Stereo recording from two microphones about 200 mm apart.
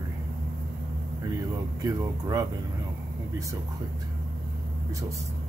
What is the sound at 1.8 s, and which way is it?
Speech, 15° right (ahead or behind).